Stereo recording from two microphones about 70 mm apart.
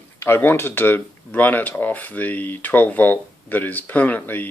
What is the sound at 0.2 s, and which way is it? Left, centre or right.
Speech, left.